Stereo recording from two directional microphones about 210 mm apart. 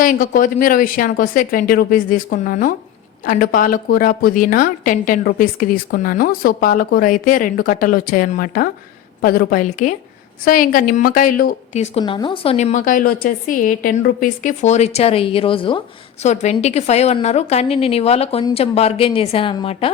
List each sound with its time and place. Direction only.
0.0 s a woman's voice: 40° left (ahead or behind)